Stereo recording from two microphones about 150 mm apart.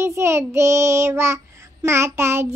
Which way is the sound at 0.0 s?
20° right (ahead or behind).